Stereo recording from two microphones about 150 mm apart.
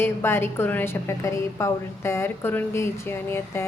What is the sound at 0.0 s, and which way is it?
A woman's voice, 15° left (ahead or behind).